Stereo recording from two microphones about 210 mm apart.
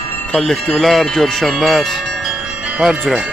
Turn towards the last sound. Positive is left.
turn(degrees=0)  # may be behind; listen again after turning